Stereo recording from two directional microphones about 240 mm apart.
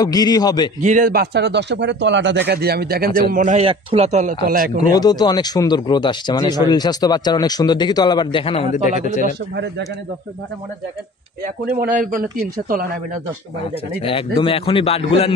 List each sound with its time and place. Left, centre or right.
0.0 s speech: centre
0.7 s a man's voice: right
4.9 s speech: centre
11.4 s a man's voice: right
14.0 s a man's voice: left